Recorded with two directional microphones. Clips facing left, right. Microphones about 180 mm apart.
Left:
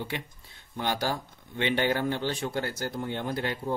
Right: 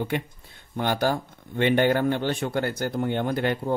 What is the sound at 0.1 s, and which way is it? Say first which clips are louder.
Speech: right 8 dB; 50° right (ahead or behind).